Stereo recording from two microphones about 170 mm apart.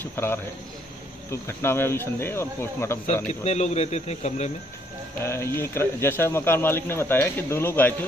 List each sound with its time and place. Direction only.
0.0 s a man's voice: 15° left (ahead or behind)
3.4 s speech: 40° left (ahead or behind)
5.2 s speech: 15° left (ahead or behind)